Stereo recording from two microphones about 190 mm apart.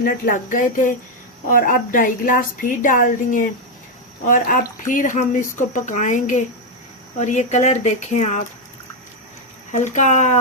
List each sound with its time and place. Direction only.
0.0 s a woman's voice: 45° left (ahead or behind)
9.7 s speech: 40° left (ahead or behind)